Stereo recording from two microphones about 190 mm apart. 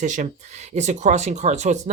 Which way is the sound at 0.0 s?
40° right (ahead or behind).